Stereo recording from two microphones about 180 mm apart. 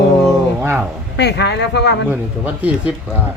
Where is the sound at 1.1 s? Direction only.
70° left (ahead or behind).